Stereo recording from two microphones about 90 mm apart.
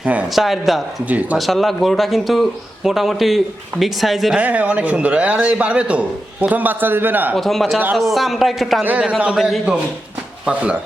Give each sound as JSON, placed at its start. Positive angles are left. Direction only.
{"t": 0.0, "sound": "a sound", "side_deg": -15}
{"t": 0.3, "sound": "a man's voice", "side_deg": 0}
{"t": 1.0, "sound": "a man's voice", "side_deg": -15}
{"t": 1.4, "sound": "a man's voice", "side_deg": 0}
{"t": 4.4, "sound": "a man's voice", "side_deg": -15}
{"t": 7.3, "sound": "a man's voice", "side_deg": 0}
{"t": 8.8, "sound": "a man's voice", "side_deg": -15}
{"t": 9.4, "sound": "a man's voice", "side_deg": -5}